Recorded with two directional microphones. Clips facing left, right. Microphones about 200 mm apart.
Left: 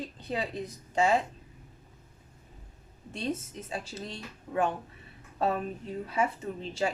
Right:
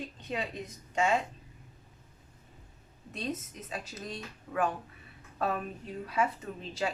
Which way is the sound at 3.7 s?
30° left (ahead or behind).